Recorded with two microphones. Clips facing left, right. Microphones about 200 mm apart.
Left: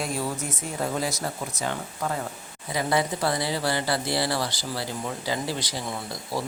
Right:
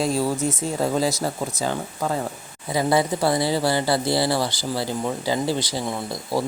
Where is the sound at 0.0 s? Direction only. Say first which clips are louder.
Right 7 dB; 35° right (ahead or behind).